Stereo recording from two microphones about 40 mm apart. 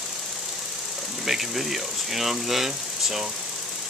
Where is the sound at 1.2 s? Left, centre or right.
Centre.